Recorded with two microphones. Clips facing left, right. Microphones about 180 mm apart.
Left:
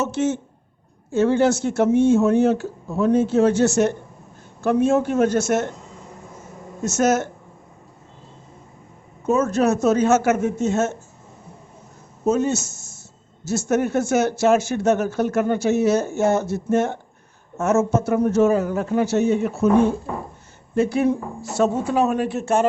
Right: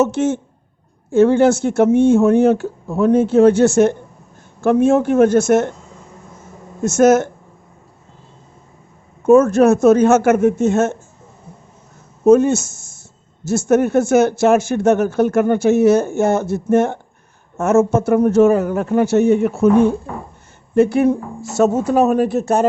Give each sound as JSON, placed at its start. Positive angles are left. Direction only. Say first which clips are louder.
{"t": 0.0, "sound": "speech", "louder": "right 6 dB", "side_deg": -55}
{"t": 6.8, "sound": "speech", "louder": "right 7 dB", "side_deg": -50}
{"t": 9.2, "sound": "speech", "louder": "right 8 dB", "side_deg": -50}
{"t": 12.2, "sound": "speech", "louder": "right 9 dB", "side_deg": -55}
{"t": 20.7, "sound": "speech", "louder": "right 5 dB", "side_deg": -55}